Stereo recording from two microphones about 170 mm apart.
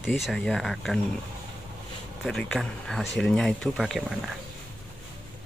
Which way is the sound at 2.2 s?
5° left (ahead or behind).